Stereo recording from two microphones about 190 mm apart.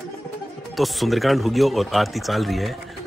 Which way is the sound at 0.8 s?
Centre (ahead or behind).